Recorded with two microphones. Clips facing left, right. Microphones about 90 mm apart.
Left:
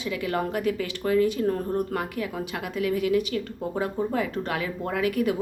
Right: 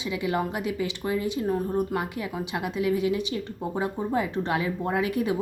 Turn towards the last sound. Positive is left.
turn(degrees=-25)  # may be behind; listen again after turning